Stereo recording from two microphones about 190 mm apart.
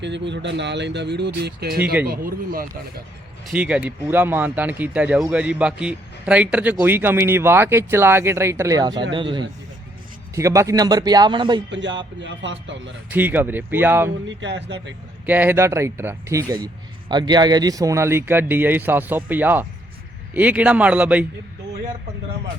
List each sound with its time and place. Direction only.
0.0 s speech: 65° right (ahead or behind); by 2.6 s 50° right (ahead or behind)
3.5 s speech: 5° right (ahead or behind); by 11.6 s 25° right (ahead or behind)
11.7 s speech: 70° right (ahead or behind)
13.1 s speech: 10° right (ahead or behind)
14.3 s speech: 70° right (ahead or behind)
15.3 s speech: 10° right (ahead or behind)